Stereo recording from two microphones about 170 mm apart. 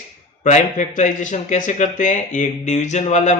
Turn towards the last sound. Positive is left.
turn(degrees=45)  # may be behind; listen again after turning